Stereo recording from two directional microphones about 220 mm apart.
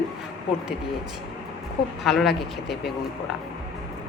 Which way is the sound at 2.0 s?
Centre (ahead or behind).